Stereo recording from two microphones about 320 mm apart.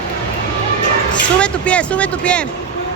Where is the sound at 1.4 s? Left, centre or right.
Centre.